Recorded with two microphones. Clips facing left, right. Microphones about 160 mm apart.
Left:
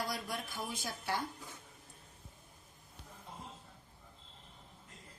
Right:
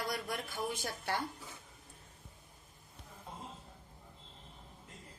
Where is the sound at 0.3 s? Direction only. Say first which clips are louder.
Right 3 dB; 60° right (ahead or behind).